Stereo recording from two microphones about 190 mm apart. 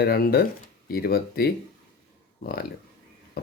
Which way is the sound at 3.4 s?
55° left (ahead or behind).